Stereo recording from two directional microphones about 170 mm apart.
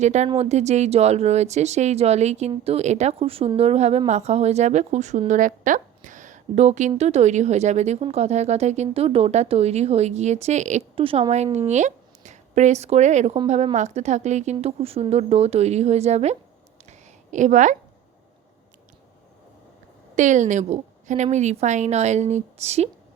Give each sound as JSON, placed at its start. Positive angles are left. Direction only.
{"t": 0.0, "sound": "a woman's voice", "side_deg": -45}
{"t": 20.1, "sound": "a woman's voice", "side_deg": -45}